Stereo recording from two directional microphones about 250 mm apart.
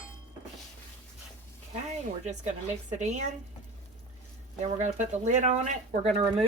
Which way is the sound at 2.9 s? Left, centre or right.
Right.